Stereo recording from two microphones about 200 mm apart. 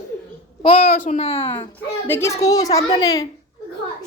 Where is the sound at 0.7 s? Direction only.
45° left (ahead or behind).